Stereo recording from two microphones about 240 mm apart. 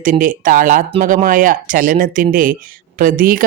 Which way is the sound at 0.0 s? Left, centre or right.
Right.